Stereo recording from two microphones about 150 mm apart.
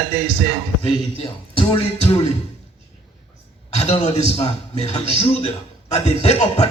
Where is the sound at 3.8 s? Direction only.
45° left (ahead or behind).